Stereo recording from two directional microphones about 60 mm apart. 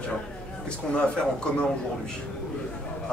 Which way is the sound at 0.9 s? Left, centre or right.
Centre.